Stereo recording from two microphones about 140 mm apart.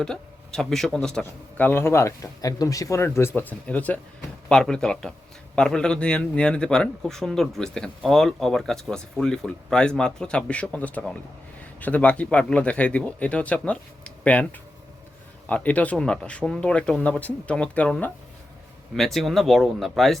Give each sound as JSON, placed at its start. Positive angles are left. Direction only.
{"t": 0.0, "sound": "a man's voice", "side_deg": 5}